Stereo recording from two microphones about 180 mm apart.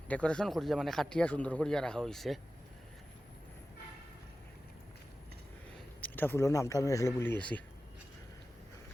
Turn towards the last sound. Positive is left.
turn(degrees=10)  # may be behind; listen again after turning